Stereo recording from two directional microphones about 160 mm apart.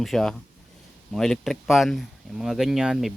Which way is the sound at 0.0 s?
Centre (ahead or behind).